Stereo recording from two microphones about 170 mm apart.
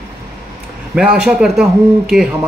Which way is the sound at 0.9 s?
5° right (ahead or behind).